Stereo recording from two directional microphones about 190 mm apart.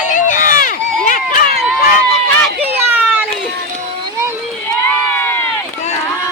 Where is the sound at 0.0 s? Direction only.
40° left (ahead or behind).